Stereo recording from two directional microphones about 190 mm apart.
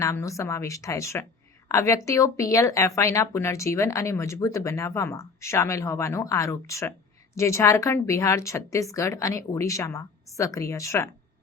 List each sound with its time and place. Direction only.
0.0 s a woman's voice: 15° left (ahead or behind)